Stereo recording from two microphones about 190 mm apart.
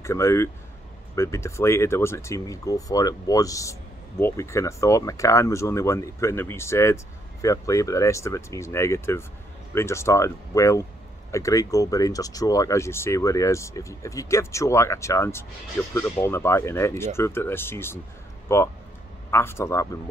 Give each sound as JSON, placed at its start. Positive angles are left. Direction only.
{"t": 0.0, "sound": "speech", "side_deg": 15}